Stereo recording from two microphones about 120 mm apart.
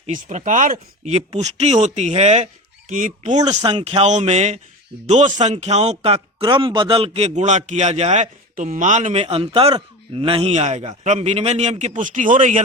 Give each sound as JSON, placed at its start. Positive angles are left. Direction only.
{"t": 0.0, "sound": "speech", "side_deg": -85}
{"t": 2.9, "sound": "speech", "side_deg": -90}
{"t": 3.6, "sound": "speech", "side_deg": -40}
{"t": 3.8, "sound": "speech", "side_deg": -65}
{"t": 9.2, "sound": "a man's voice", "side_deg": -50}
{"t": 10.5, "sound": "speech", "side_deg": -65}